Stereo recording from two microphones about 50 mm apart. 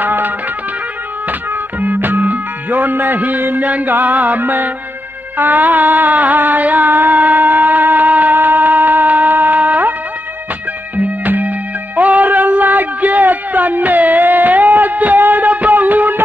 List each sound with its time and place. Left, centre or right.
0.0 s music: right
1.8 s music: right
11.0 s music: right